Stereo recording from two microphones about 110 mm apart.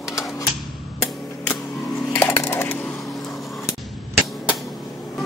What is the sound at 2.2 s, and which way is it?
Coin, 20° left (ahead or behind).